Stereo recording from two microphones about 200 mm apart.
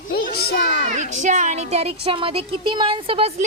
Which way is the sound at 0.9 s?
35° right (ahead or behind).